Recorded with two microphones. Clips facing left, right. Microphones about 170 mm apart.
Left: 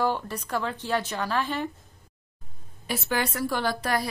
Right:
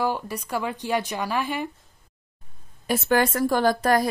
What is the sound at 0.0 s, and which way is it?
A woman's voice, 10° right (ahead or behind).